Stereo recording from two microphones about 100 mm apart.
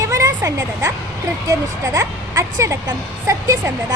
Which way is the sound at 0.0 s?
35° right (ahead or behind).